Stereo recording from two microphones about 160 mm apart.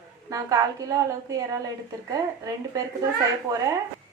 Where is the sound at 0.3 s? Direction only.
20° right (ahead or behind).